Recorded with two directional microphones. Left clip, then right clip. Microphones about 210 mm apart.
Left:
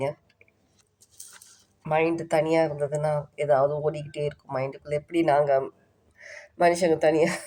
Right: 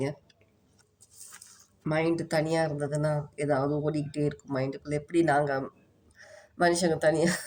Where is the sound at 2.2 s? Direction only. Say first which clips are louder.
Left 5 dB; 25° left (ahead or behind).